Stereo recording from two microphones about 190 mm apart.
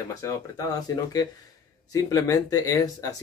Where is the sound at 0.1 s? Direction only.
20° left (ahead or behind).